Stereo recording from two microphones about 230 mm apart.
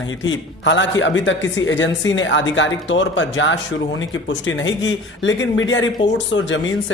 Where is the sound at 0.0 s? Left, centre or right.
Left.